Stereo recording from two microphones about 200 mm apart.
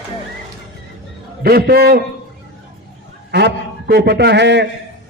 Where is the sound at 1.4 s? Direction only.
50° right (ahead or behind).